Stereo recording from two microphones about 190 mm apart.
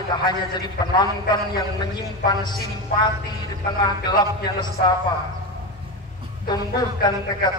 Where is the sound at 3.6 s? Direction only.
20° left (ahead or behind).